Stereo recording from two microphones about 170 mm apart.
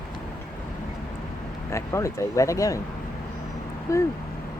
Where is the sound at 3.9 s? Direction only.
15° left (ahead or behind).